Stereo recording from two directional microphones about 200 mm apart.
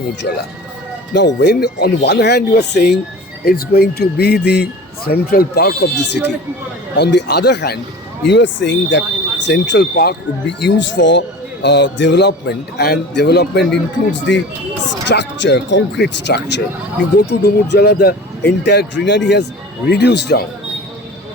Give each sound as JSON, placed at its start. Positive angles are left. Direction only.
{"t": 0.2, "sound": "speech", "side_deg": 55}